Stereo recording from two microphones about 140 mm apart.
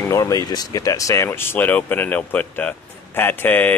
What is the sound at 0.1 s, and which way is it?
Speech, 25° left (ahead or behind).